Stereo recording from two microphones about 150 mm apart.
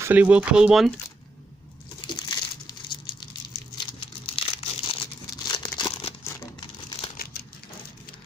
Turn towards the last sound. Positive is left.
turn(degrees=30)  # may be behind; listen again after turning